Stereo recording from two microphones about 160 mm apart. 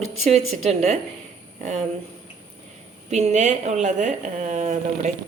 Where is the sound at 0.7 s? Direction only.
45° right (ahead or behind).